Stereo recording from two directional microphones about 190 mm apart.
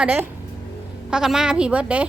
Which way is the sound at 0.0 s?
5° right (ahead or behind).